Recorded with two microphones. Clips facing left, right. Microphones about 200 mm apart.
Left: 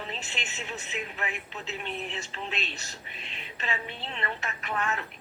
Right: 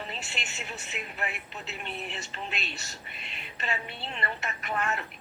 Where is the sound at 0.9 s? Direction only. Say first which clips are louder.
Left 1 dB; 35° left (ahead or behind).